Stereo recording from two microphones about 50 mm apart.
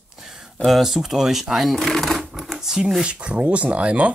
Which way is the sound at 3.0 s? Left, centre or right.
Right.